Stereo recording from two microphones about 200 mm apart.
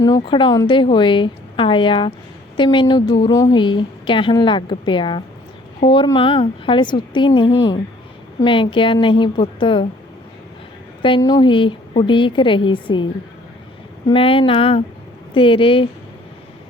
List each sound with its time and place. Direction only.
0.3 s a woman's voice: 25° left (ahead or behind)
11.0 s a woman's voice: 20° left (ahead or behind)
14.1 s a woman's voice: 25° left (ahead or behind)